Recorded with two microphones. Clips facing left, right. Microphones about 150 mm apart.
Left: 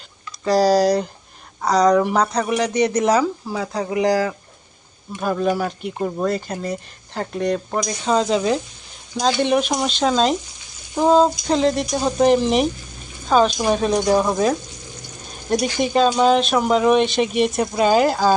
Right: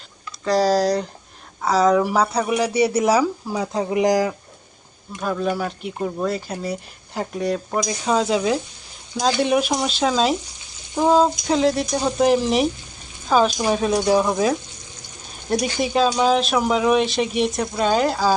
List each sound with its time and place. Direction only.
0.4 s speech: centre (ahead or behind); by 4.4 s 15° right (ahead or behind)
5.2 s speech: centre (ahead or behind)
6.2 s speech: 5° right (ahead or behind)